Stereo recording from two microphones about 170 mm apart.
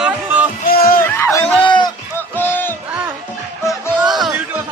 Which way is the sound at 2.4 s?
10° left (ahead or behind).